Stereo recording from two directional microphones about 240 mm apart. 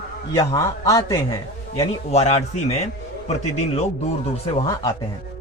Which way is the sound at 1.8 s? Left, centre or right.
Left.